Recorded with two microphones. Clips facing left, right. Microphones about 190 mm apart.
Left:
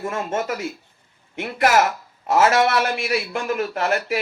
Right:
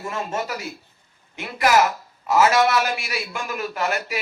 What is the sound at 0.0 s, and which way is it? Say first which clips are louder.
A man's voice: left 3 dB; 50° left (ahead or behind).